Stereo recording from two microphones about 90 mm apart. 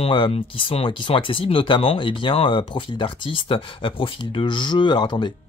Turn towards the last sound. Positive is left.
turn(degrees=60)  # may be behind; listen again after turning